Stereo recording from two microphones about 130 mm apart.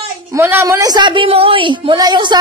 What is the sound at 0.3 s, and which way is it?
A woman's voice, 20° right (ahead or behind).